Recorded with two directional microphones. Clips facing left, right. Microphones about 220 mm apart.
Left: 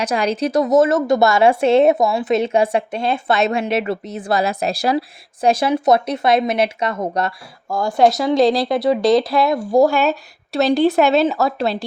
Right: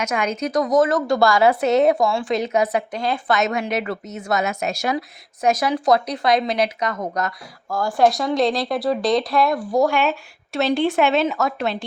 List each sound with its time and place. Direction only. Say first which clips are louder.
0.0 s speech: left 4 dB; 35° left (ahead or behind)
8.7 s speech: left 5 dB; centre (ahead or behind)
9.5 s speech: left 4 dB; 30° left (ahead or behind)